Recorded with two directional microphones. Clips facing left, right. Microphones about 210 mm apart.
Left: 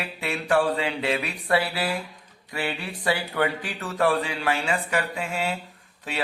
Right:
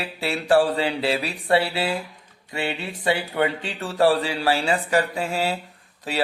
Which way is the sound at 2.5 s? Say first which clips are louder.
Right 2 dB; 25° right (ahead or behind).